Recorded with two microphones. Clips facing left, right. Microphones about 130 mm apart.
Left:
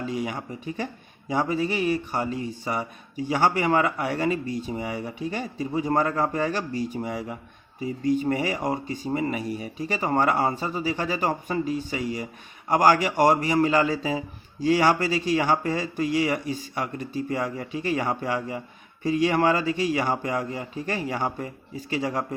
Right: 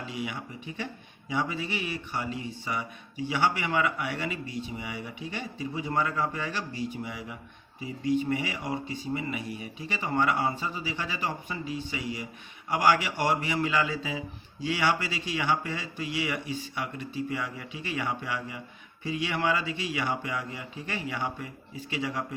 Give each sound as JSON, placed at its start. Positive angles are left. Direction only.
{"t": 0.0, "sound": "speech", "side_deg": 40}